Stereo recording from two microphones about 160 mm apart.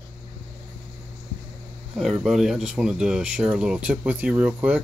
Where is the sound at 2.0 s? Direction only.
Centre (ahead or behind).